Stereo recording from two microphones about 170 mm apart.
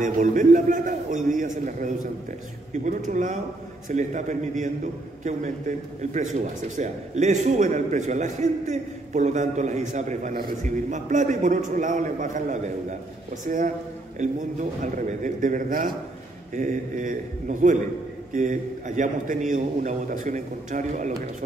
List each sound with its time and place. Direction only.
0.0 s a man's voice: 50° right (ahead or behind)
14.2 s a man's voice: 45° right (ahead or behind)